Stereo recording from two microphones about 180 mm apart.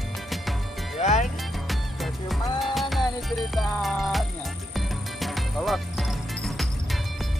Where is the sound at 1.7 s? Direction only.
Centre (ahead or behind).